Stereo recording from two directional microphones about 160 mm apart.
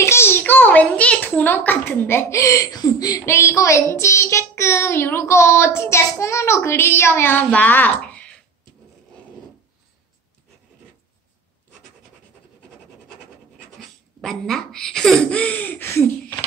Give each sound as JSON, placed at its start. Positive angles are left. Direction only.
{"t": 0.0, "sound": "a child's voice", "side_deg": 15}
{"t": 13.7, "sound": "speech", "side_deg": 0}